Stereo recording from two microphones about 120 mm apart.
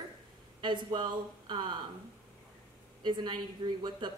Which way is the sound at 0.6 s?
40° right (ahead or behind).